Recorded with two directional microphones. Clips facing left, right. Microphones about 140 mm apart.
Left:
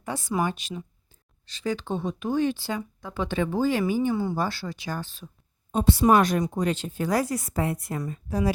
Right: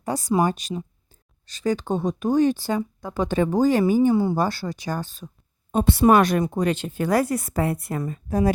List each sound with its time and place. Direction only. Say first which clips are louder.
0.0 s speech: right 6 dB; 40° right (ahead or behind)
4.1 s speech: right 6 dB; 25° right (ahead or behind)
4.4 s speech: right 5 dB; 40° right (ahead or behind)
5.7 s speech: right 3 dB; 60° right (ahead or behind)